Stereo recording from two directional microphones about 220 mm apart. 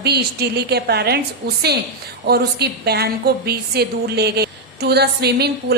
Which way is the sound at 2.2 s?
45° right (ahead or behind).